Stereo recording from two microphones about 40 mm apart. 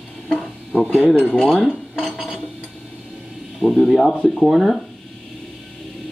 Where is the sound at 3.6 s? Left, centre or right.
Centre.